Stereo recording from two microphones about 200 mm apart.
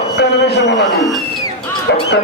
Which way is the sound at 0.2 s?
55° left (ahead or behind).